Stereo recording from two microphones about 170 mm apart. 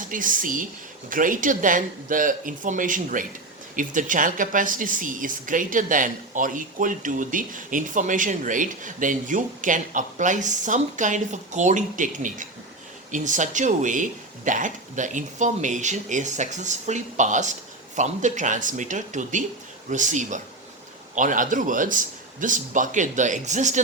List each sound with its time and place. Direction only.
0.1 s speech: 50° right (ahead or behind)